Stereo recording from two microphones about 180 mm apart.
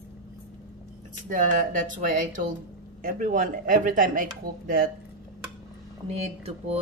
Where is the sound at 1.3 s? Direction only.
45° right (ahead or behind).